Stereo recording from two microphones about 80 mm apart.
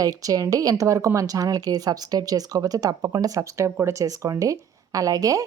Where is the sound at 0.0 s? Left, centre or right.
Right.